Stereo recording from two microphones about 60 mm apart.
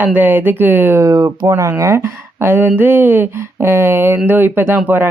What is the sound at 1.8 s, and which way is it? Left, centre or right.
Speech, right.